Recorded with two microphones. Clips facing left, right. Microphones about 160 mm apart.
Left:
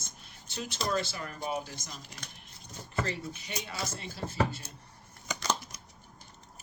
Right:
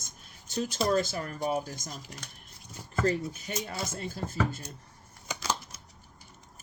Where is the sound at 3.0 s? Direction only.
45° right (ahead or behind).